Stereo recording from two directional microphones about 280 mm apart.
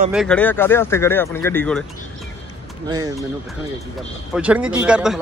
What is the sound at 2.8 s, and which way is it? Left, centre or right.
Speech, centre.